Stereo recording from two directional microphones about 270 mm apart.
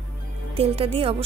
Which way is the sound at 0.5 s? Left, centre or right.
Right.